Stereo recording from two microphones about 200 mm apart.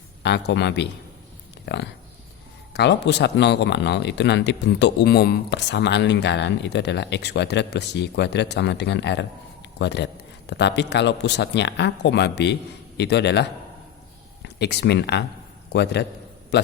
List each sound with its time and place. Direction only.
0.2 s speech: 60° left (ahead or behind)